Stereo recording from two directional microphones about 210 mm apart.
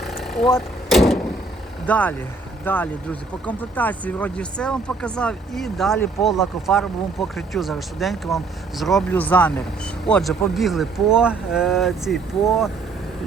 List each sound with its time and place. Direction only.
0.0 s vehicle: centre (ahead or behind)
1.9 s speech: 5° left (ahead or behind)